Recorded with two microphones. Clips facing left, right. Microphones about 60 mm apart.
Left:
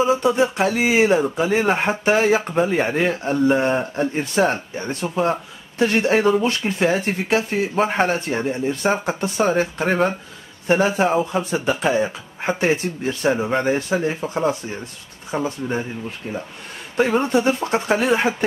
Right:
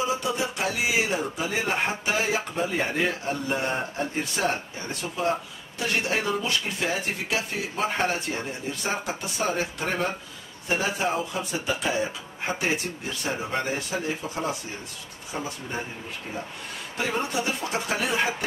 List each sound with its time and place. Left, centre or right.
0.0 s speech: left
17.2 s speech: left